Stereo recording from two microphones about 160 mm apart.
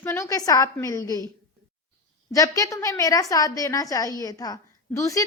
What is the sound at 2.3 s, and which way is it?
A woman's voice, 20° left (ahead or behind).